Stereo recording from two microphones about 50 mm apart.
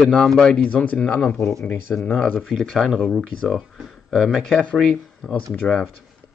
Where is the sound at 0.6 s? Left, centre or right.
Left.